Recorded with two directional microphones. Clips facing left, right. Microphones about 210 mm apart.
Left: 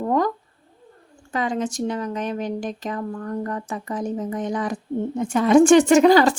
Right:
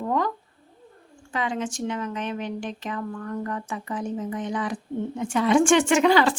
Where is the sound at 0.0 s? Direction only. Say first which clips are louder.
Left 4 dB; 40° left (ahead or behind).